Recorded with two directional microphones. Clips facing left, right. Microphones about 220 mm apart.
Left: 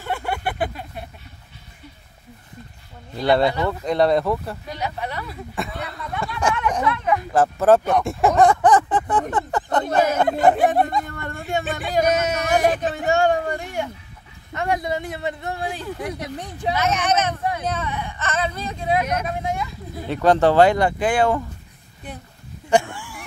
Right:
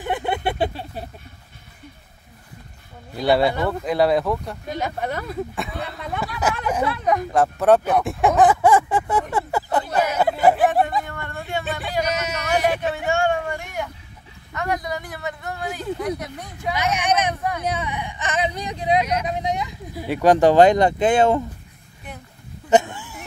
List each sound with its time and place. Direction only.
0.0 s a sound: 20° right (ahead or behind)
3.2 s speech: 5° right (ahead or behind)
4.6 s speech: 50° right (ahead or behind)
5.5 s speech: centre (ahead or behind)
6.8 s speech: 30° right (ahead or behind)
7.3 s speech: centre (ahead or behind)
9.3 s a sound: 10° right (ahead or behind)
10.1 s speech: 5° right (ahead or behind)
11.1 s hubbub: 45° left (ahead or behind)
11.9 s speech: 50° left (ahead or behind); by 16.7 s 30° left (ahead or behind)
16.7 s speech: 15° right (ahead or behind)
22.7 s a sound: 20° right (ahead or behind)